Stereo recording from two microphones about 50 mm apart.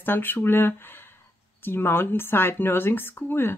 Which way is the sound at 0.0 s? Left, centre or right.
Left.